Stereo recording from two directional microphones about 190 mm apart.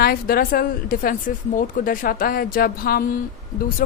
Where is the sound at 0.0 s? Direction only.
50° left (ahead or behind).